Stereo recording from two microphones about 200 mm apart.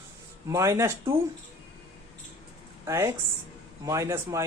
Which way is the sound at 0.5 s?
15° right (ahead or behind).